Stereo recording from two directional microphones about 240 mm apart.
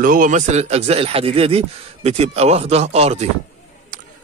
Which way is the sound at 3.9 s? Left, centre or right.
Right.